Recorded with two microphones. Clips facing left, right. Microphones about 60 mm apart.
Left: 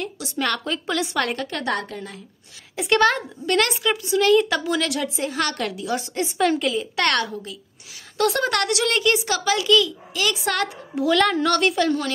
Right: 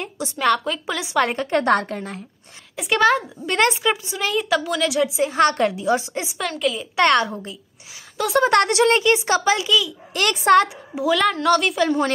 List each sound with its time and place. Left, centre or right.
0.4 s a woman's voice: centre
1.7 s a woman's voice: right
2.7 s a woman's voice: centre
3.5 s a woman's voice: right
4.3 s a woman's voice: centre
5.3 s speech: right
6.2 s speech: centre
7.0 s a woman's voice: centre
8.4 s speech: right
9.7 s a woman's voice: centre
10.1 s a woman's voice: right
10.4 s speech: right
11.0 s a woman's voice: centre